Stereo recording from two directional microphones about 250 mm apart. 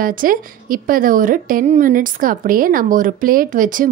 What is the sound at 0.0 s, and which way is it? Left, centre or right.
A woman's voice, right.